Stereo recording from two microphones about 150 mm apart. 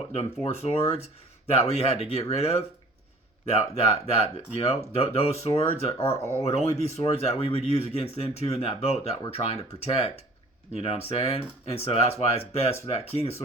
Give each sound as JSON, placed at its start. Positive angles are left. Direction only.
{"t": 0.1, "sound": "speech", "side_deg": 45}
{"t": 3.8, "sound": "speech", "side_deg": 45}